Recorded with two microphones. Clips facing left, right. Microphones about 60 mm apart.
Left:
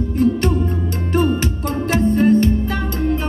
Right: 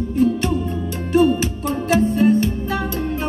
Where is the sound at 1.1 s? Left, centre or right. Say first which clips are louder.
Right 3 dB; left.